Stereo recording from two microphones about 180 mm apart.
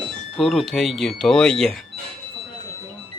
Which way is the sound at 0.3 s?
Centre (ahead or behind).